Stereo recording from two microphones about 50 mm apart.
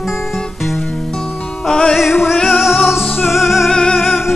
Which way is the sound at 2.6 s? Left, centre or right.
Centre.